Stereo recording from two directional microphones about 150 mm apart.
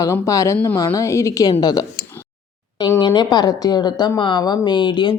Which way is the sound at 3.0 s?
30° left (ahead or behind).